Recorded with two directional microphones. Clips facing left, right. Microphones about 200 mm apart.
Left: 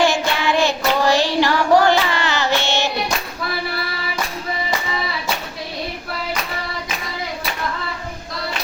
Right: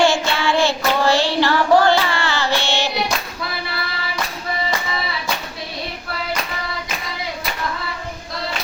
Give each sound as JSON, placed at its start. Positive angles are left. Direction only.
{"t": 0.0, "sound": "child singing", "side_deg": 20}